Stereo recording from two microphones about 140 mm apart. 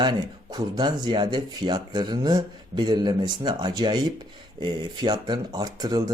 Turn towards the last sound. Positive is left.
turn(degrees=-30)  # may be behind; listen again after turning